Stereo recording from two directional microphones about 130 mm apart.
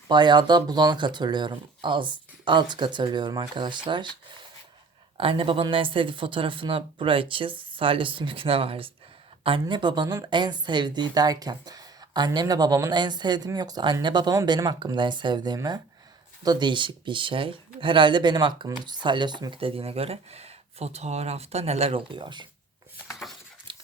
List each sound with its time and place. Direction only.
0.1 s speech: 35° right (ahead or behind)
5.1 s speech: 45° right (ahead or behind)
22.1 s speech: 35° right (ahead or behind)
23.7 s a sound: 40° right (ahead or behind)